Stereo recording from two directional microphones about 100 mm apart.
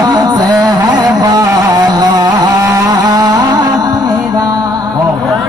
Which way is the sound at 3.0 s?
40° right (ahead or behind).